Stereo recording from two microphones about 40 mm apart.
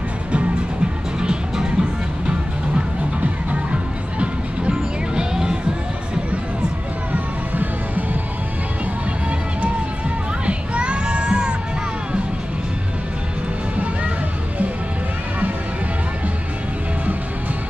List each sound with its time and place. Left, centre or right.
1.2 s music: right
7.1 s music: right
10.4 s music: right